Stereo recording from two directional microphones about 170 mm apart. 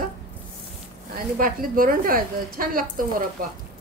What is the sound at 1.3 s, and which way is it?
A woman's voice, 55° right (ahead or behind).